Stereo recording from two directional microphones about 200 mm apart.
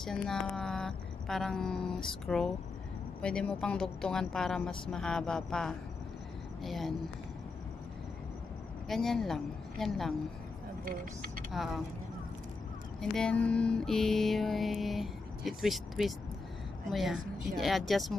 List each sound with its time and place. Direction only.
0.0 s mantra: 5° left (ahead or behind)
8.8 s a woman's voice: centre (ahead or behind)
11.5 s mantra: centre (ahead or behind)
13.0 s mantra: 5° left (ahead or behind)